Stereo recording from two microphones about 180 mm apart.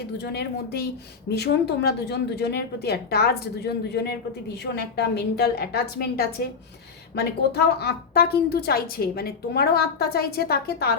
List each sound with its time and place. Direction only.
0.2 s a woman's voice: 65° left (ahead or behind)